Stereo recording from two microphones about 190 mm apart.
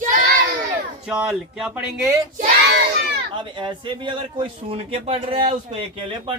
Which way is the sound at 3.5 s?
25° right (ahead or behind).